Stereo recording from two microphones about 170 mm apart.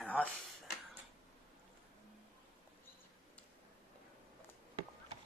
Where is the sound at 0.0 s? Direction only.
10° left (ahead or behind).